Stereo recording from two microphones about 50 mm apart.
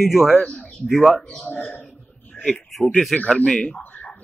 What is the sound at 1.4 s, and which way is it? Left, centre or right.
Speech, left.